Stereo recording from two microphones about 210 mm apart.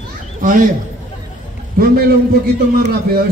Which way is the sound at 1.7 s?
45° right (ahead or behind).